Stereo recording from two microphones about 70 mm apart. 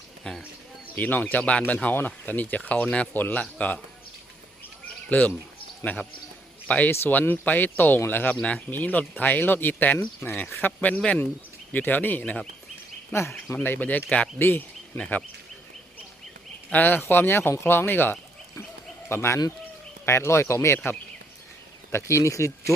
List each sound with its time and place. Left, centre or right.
0.3 s speech: centre
0.9 s speech: left
3.2 s speech: left
5.0 s speech: left
10.8 s speech: centre
12.2 s speech: centre
13.6 s speech: left
14.9 s speech: centre
16.6 s speech: left
21.9 s speech: left